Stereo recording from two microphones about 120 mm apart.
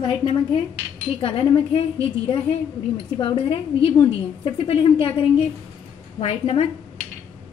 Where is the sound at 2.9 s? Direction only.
40° left (ahead or behind).